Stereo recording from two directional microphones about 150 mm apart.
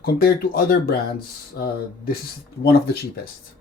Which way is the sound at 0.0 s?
90° left.